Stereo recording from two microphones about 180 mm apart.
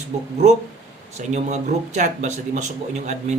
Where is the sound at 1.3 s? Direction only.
40° right (ahead or behind).